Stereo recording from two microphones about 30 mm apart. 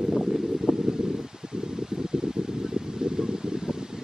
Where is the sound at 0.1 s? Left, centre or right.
Centre.